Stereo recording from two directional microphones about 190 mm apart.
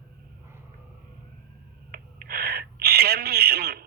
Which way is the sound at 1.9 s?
50° right (ahead or behind).